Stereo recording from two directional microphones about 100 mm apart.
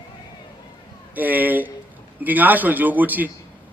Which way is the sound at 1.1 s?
15° right (ahead or behind).